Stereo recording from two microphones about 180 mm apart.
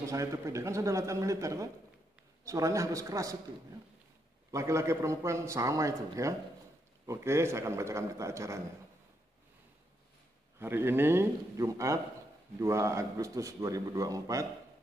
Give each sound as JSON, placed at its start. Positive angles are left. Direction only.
{"t": 0.0, "sound": "a man's voice", "side_deg": -15}
{"t": 4.5, "sound": "a man's voice", "side_deg": -15}
{"t": 10.6, "sound": "a man's voice", "side_deg": -10}